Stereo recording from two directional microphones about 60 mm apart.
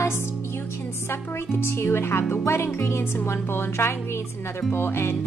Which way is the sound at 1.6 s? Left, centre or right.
Left.